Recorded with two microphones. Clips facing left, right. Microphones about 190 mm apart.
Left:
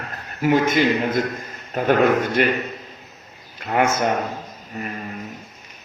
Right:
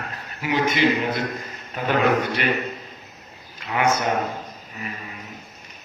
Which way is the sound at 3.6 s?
50° left (ahead or behind).